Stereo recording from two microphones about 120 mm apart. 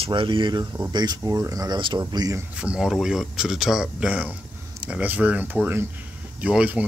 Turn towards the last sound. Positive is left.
turn(degrees=-10)  # may be behind; listen again after turning